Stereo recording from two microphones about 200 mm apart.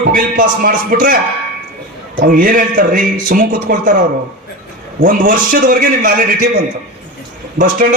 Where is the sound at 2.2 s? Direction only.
45° right (ahead or behind).